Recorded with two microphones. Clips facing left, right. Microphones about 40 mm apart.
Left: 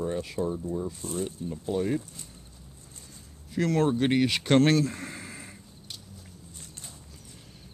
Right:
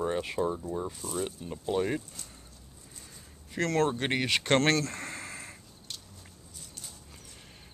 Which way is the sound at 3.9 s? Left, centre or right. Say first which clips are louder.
Left 5 dB; centre.